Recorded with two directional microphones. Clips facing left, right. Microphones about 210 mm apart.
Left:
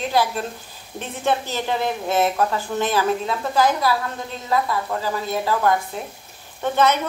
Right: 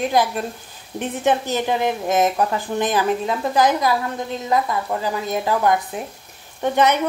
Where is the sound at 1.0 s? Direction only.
15° right (ahead or behind).